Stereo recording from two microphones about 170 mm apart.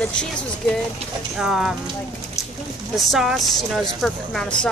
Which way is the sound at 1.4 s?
5° right (ahead or behind).